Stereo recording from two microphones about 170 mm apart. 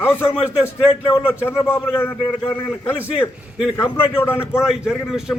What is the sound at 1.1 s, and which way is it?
A man's voice, 15° left (ahead or behind).